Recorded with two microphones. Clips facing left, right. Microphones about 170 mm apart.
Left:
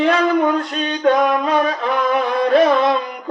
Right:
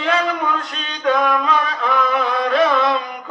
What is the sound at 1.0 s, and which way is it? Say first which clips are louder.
Music: left 2 dB; 40° left (ahead or behind).